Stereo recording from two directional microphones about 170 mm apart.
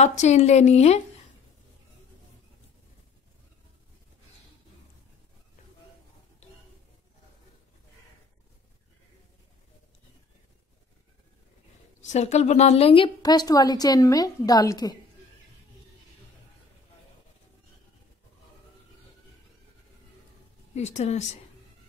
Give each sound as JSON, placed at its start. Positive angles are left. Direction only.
{"t": 0.0, "sound": "a woman's voice", "side_deg": 40}
{"t": 12.1, "sound": "speech", "side_deg": 40}
{"t": 20.7, "sound": "a woman's voice", "side_deg": 40}